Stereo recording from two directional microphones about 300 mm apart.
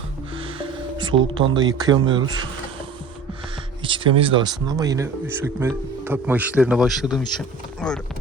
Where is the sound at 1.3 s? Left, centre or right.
Centre.